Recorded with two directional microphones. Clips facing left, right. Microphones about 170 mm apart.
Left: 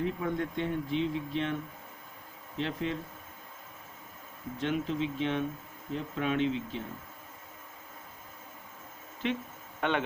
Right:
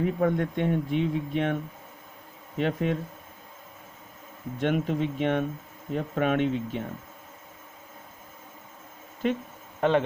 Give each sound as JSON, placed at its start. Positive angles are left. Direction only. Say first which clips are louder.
{"t": 0.0, "sound": "speech", "louder": "right 7 dB", "side_deg": -60}
{"t": 2.6, "sound": "speech", "louder": "right 6 dB", "side_deg": -60}
{"t": 4.6, "sound": "speech", "louder": "right 5 dB", "side_deg": -55}
{"t": 9.2, "sound": "a man's voice", "louder": "right 5 dB", "side_deg": -45}